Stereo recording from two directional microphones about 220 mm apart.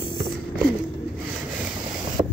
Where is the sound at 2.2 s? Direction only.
15° right (ahead or behind).